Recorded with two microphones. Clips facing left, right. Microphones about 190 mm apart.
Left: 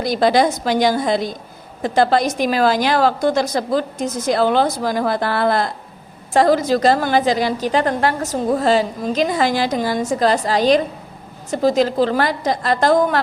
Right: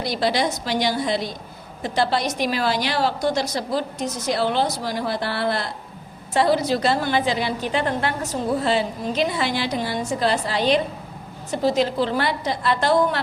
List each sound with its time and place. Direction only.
0.0 s a woman's voice: 50° left (ahead or behind)
11.8 s a woman's voice: 45° left (ahead or behind)